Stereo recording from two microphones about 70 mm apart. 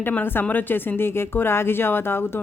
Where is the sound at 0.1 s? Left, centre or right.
Left.